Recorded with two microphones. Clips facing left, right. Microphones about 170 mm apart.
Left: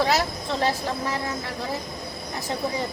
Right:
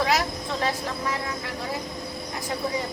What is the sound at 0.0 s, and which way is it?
Vehicle, 30° left (ahead or behind).